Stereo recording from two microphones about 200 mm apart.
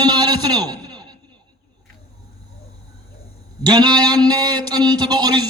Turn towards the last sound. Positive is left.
turn(degrees=-20)  # may be behind; listen again after turning